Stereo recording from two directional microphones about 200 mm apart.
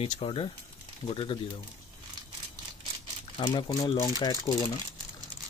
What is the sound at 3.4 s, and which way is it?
Speech, 25° left (ahead or behind).